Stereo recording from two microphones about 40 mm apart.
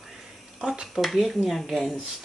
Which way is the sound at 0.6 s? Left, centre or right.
Centre.